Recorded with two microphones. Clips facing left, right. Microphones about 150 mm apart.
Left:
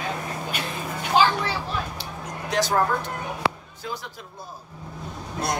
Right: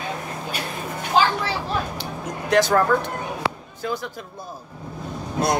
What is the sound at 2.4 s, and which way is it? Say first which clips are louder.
Speech: right 5 dB; 60° right (ahead or behind).